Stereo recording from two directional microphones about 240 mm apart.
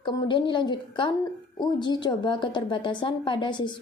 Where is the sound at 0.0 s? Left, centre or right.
Centre.